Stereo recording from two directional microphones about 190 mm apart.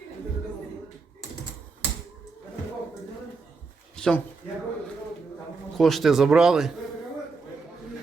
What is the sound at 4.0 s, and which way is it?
Speech, 5° left (ahead or behind).